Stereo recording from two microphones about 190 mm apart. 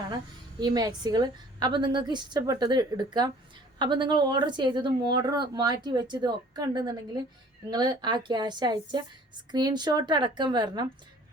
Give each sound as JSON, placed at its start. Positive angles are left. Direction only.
{"t": 0.6, "sound": "speech", "side_deg": -20}